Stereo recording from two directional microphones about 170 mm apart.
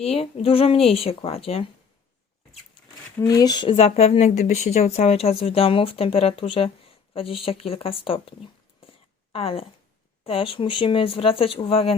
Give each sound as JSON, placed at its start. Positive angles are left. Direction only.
{"t": 0.0, "sound": "speech", "side_deg": 35}
{"t": 3.2, "sound": "speech", "side_deg": 20}
{"t": 8.8, "sound": "a sound", "side_deg": 35}
{"t": 10.2, "sound": "speech", "side_deg": 30}